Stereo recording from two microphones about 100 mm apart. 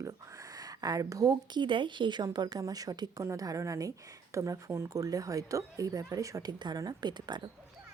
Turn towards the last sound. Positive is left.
turn(degrees=-50)  # may be behind; listen again after turning